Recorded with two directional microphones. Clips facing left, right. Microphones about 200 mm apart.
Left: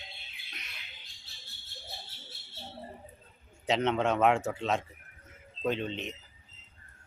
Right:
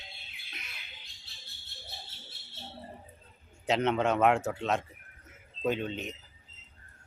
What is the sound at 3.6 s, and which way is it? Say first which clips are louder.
Speech: right 1 dB; centre (ahead or behind).